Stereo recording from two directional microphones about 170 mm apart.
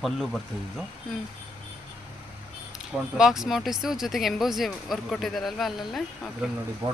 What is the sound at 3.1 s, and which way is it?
Speech, centre (ahead or behind).